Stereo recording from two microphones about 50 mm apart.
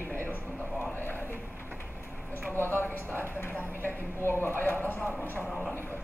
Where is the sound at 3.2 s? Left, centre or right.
Left.